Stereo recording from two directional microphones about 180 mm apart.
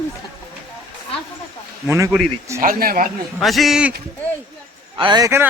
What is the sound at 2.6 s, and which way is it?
Speech, 50° right (ahead or behind).